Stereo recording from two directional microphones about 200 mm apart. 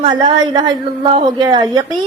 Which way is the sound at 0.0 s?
25° right (ahead or behind).